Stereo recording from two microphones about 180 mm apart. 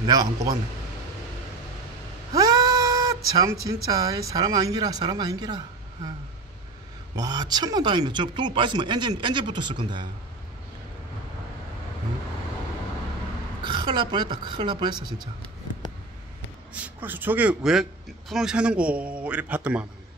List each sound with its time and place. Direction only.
0.0 s speech: 20° right (ahead or behind)
2.3 s cat: 20° right (ahead or behind)
3.3 s speech: 20° right (ahead or behind)
7.2 s speech: 20° right (ahead or behind)
13.7 s speech: 25° right (ahead or behind)
16.7 s speech: 10° right (ahead or behind)